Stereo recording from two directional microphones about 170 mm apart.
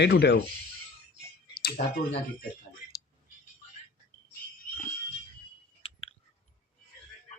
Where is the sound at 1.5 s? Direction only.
65° left (ahead or behind).